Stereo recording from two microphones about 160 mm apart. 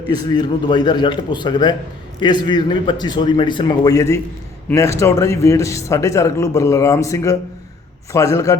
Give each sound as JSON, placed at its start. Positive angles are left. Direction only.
{"t": 0.1, "sound": "speech", "side_deg": 25}